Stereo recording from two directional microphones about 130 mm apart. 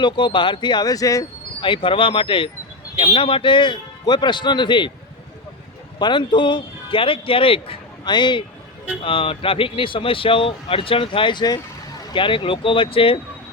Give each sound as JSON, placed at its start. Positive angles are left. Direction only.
{"t": 0.0, "sound": "speech", "side_deg": 35}
{"t": 1.6, "sound": "speech", "side_deg": 40}
{"t": 6.0, "sound": "speech", "side_deg": 35}